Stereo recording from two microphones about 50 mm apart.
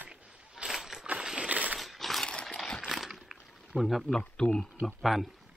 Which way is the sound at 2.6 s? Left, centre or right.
Centre.